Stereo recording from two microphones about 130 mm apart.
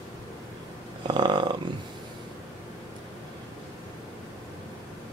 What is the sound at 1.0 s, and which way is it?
Snoring, 35° right (ahead or behind).